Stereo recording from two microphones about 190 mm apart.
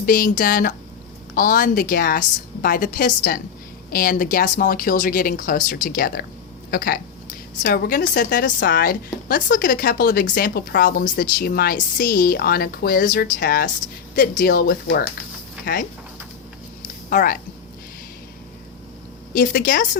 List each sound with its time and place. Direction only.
0.0 s a woman's voice: 50° left (ahead or behind)
8.3 s a woman's voice: 60° left (ahead or behind)
17.1 s a woman's voice: 50° left (ahead or behind)
19.3 s a woman's voice: 45° left (ahead or behind)